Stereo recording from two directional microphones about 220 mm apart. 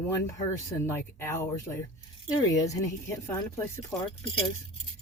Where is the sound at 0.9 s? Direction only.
10° left (ahead or behind).